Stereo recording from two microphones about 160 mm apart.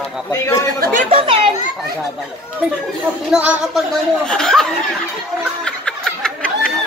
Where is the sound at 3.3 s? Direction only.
5° right (ahead or behind).